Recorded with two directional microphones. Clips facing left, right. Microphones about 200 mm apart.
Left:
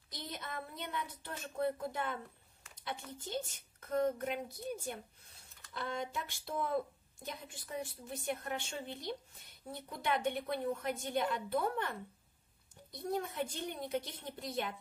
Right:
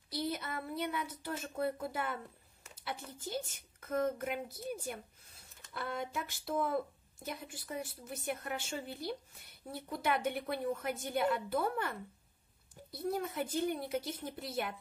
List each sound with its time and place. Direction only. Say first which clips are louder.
0.1 s child singing: right 7 dB; 5° right (ahead or behind)
1.6 s a woman's voice: left 1 dB; 5° right (ahead or behind)